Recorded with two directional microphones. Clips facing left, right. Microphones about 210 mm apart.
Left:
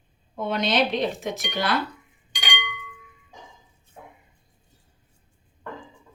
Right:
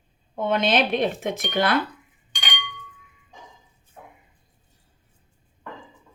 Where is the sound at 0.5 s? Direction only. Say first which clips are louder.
Right 1 dB; 55° right (ahead or behind).